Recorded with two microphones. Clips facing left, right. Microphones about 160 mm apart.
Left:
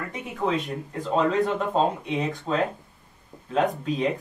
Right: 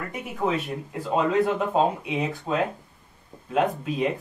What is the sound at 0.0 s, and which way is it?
Speech, 5° right (ahead or behind).